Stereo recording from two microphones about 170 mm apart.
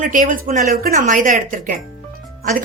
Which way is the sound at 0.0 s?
50° right (ahead or behind).